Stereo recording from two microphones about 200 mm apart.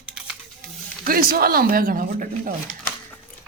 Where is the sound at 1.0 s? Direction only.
45° right (ahead or behind).